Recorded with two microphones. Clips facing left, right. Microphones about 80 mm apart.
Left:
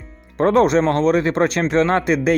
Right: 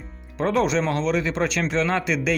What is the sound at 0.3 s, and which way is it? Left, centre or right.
Speech, left.